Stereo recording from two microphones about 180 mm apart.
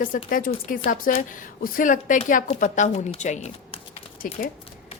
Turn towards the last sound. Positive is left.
turn(degrees=50)  # may be behind; listen again after turning